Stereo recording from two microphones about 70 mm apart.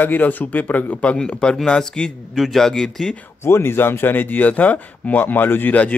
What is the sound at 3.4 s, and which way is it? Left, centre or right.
Speech, left.